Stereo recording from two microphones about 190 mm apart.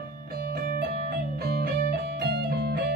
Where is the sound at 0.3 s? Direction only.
55° right (ahead or behind).